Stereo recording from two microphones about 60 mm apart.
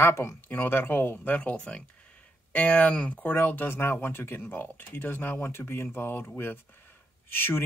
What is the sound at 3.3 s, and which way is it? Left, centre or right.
Speech, left.